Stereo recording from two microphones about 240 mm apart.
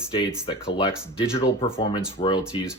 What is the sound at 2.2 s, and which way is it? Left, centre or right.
Speech, centre.